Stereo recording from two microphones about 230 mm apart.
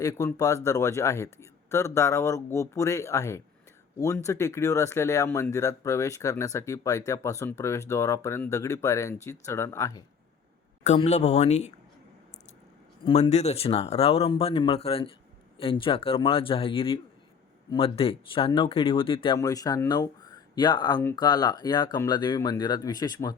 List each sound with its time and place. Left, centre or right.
0.0 s speech: centre
10.8 s speech: left
13.1 s speech: left